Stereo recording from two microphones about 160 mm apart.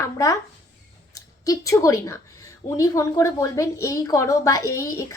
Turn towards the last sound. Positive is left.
turn(degrees=20)  # may be behind; listen again after turning